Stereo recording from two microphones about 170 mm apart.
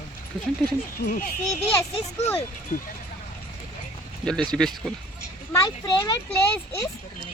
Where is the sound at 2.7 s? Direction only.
45° left (ahead or behind).